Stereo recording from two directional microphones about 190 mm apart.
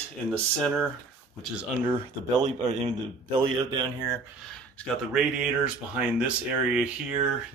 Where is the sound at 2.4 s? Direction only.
35° right (ahead or behind).